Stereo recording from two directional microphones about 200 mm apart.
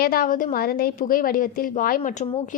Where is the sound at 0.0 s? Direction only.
45° left (ahead or behind).